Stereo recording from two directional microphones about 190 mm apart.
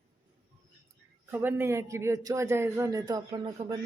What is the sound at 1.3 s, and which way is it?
A man's voice, 10° right (ahead or behind).